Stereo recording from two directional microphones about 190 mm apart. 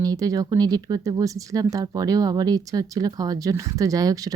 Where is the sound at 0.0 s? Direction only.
20° right (ahead or behind).